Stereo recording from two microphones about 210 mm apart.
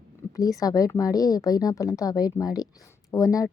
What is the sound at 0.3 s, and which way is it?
A woman's voice, 15° left (ahead or behind).